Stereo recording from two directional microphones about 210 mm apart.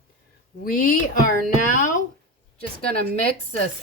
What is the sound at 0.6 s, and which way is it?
Speech, 40° left (ahead or behind).